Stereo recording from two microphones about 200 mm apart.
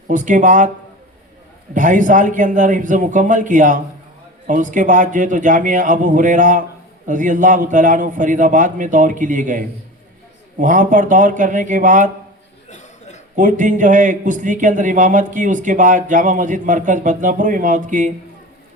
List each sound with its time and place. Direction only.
0.1 s a man's voice: 40° right (ahead or behind)
1.7 s a man's voice: 40° right (ahead or behind)
13.3 s a man's voice: 40° right (ahead or behind)